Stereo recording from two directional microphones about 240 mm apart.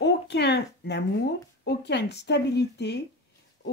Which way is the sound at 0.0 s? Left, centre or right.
Left.